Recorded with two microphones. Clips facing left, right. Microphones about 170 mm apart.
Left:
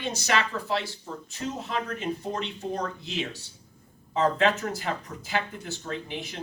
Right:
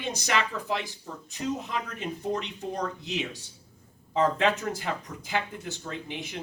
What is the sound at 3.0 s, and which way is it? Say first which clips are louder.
Speech: even; 15° right (ahead or behind).